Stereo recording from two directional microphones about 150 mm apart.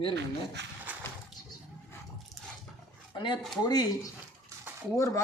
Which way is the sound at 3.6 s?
25° left (ahead or behind).